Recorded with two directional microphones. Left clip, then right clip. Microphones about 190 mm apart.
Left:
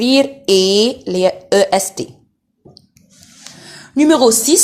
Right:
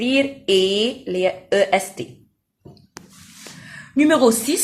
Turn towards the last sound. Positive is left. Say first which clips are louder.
# left 5 dB
turn(degrees=30)  # may be behind; listen again after turning